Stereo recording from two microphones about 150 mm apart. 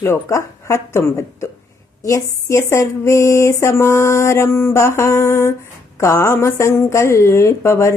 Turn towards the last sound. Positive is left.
turn(degrees=15)  # may be behind; listen again after turning